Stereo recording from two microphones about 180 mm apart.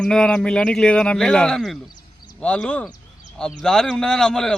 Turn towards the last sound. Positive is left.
turn(degrees=5)  # may be behind; listen again after turning